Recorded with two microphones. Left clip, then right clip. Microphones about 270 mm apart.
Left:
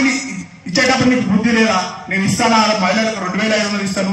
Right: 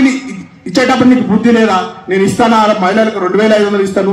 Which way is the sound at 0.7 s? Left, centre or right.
Right.